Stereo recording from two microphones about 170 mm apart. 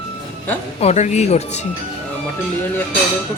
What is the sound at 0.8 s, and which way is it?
Speech, 40° left (ahead or behind).